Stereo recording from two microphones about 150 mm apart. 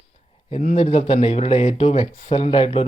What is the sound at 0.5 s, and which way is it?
Speech, 50° left (ahead or behind).